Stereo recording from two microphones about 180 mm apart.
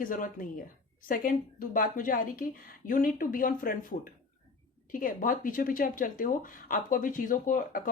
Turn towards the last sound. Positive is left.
turn(degrees=50)  # may be behind; listen again after turning